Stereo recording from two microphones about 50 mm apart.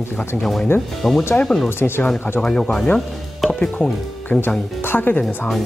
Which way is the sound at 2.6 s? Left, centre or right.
Centre.